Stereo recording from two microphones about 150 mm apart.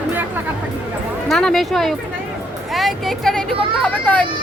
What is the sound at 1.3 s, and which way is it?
Speech, centre (ahead or behind).